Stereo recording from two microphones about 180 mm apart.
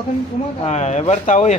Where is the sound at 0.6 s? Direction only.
40° left (ahead or behind).